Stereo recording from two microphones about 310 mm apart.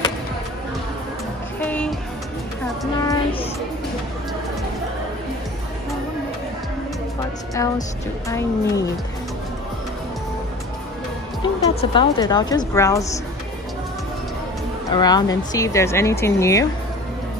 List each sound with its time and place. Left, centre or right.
1.7 s music: centre
3.0 s music: centre
7.5 s speech: centre
11.4 s music: centre
11.8 s speech: centre
14.9 s speech: centre